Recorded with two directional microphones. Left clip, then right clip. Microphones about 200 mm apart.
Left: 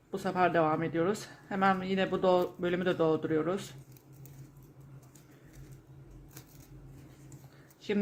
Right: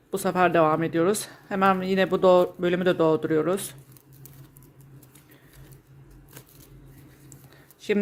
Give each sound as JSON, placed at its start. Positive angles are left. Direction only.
{"t": 0.1, "sound": "speech", "side_deg": -35}